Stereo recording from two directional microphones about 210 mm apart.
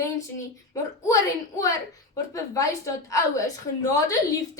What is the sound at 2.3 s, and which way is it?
A woman's voice, 15° left (ahead or behind).